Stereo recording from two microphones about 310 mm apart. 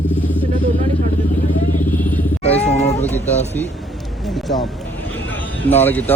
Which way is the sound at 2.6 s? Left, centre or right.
Left.